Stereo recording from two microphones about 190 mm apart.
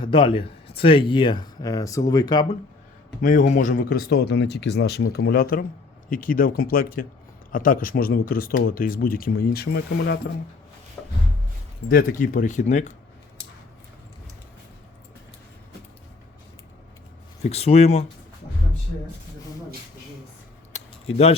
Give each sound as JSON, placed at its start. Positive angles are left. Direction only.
{"t": 0.0, "sound": "speech", "side_deg": 25}
{"t": 3.2, "sound": "speech", "side_deg": 45}
{"t": 11.0, "sound": "rub", "side_deg": 5}
{"t": 11.9, "sound": "speech", "side_deg": 50}
{"t": 17.4, "sound": "speech", "side_deg": 30}
{"t": 20.7, "sound": "a sound", "side_deg": 30}